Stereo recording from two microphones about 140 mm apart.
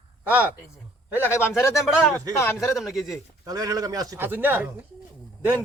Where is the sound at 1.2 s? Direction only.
15° left (ahead or behind).